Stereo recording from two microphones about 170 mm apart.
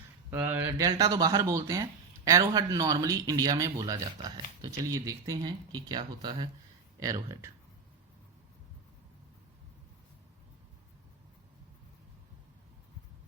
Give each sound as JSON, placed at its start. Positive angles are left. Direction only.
{"t": 0.3, "sound": "speech", "side_deg": -10}